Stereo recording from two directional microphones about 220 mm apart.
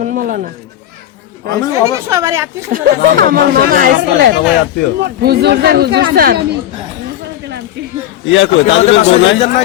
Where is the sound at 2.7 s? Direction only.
45° right (ahead or behind).